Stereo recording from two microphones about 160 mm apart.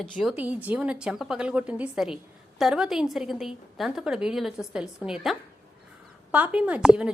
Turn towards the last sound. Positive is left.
turn(degrees=-5)  # may be behind; listen again after turning